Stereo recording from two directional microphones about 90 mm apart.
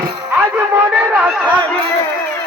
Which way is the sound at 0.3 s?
25° right (ahead or behind).